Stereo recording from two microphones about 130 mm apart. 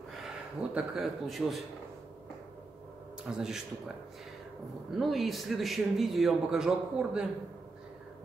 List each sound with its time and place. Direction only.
0.1 s a man's voice: 5° right (ahead or behind)
3.3 s a man's voice: 5° right (ahead or behind)
4.9 s a man's voice: centre (ahead or behind)